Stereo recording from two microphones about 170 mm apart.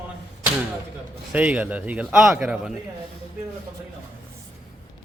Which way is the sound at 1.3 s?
10° right (ahead or behind).